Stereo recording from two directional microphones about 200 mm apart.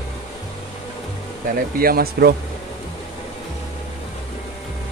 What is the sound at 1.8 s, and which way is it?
Speech, 50° right (ahead or behind).